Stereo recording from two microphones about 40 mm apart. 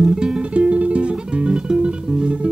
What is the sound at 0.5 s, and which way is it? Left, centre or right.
Music, right.